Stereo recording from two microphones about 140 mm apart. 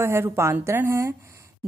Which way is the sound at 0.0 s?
20° right (ahead or behind).